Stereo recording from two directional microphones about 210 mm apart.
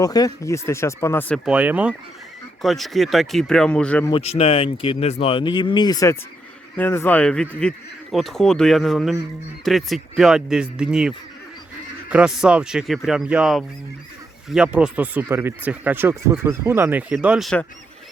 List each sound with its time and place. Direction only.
0.0 s speech: 15° left (ahead or behind)
1.5 s speech: 5° right (ahead or behind)
4.1 s speech: 30° left (ahead or behind); by 17.7 s centre (ahead or behind)